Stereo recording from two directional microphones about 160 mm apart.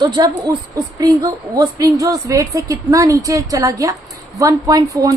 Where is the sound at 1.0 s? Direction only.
25° right (ahead or behind).